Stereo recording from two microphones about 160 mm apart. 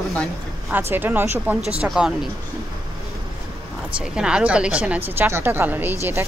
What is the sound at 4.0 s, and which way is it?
A woman's voice, 5° right (ahead or behind).